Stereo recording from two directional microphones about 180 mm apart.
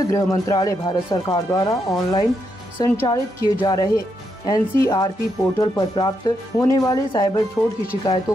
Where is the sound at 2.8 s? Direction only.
20° left (ahead or behind).